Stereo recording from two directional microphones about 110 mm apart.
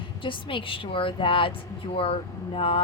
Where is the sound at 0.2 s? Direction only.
50° left (ahead or behind).